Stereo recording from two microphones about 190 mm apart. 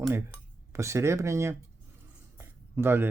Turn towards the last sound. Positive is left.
turn(degrees=-10)  # may be behind; listen again after turning